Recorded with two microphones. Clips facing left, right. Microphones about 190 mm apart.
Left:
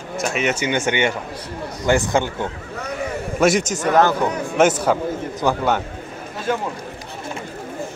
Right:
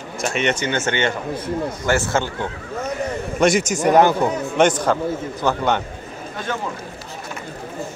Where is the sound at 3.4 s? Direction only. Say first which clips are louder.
Even; centre (ahead or behind).